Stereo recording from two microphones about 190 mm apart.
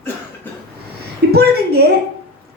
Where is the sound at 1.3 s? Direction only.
55° right (ahead or behind).